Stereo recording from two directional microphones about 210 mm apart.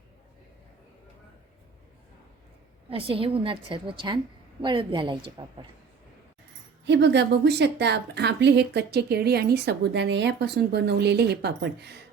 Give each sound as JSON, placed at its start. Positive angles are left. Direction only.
{"t": 2.9, "sound": "a woman's voice", "side_deg": -25}
{"t": 6.8, "sound": "speech", "side_deg": -55}